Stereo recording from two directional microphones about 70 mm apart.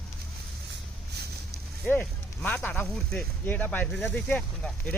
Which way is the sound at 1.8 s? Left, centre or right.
Left.